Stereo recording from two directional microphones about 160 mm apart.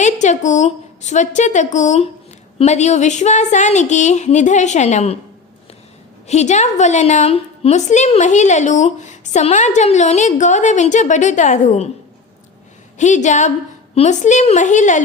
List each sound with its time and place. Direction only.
0.0 s a woman's voice: 50° left (ahead or behind)
6.2 s a woman's voice: 45° left (ahead or behind)
13.0 s a woman's voice: 50° left (ahead or behind)